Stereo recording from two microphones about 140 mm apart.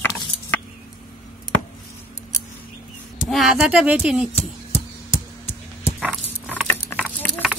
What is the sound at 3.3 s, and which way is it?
Speech, 5° right (ahead or behind).